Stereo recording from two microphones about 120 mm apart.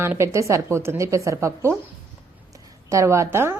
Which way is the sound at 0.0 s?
20° right (ahead or behind).